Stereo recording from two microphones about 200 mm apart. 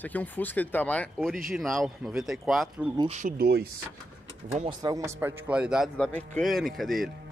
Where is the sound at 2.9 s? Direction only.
35° right (ahead or behind); by 3.7 s 50° right (ahead or behind).